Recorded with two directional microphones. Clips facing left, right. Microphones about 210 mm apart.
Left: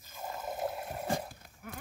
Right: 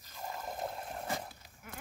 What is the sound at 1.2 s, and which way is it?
Horse, 50° left (ahead or behind).